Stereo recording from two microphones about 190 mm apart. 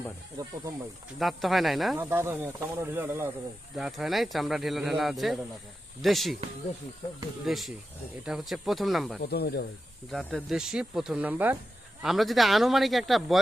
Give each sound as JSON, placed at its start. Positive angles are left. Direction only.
{"t": 0.4, "sound": "speech", "side_deg": -20}
{"t": 1.2, "sound": "speech", "side_deg": 0}
{"t": 2.0, "sound": "speech", "side_deg": -10}
{"t": 3.8, "sound": "speech", "side_deg": 0}
{"t": 7.4, "sound": "speech", "side_deg": 0}
{"t": 9.2, "sound": "speech", "side_deg": 55}
{"t": 10.1, "sound": "speech", "side_deg": 0}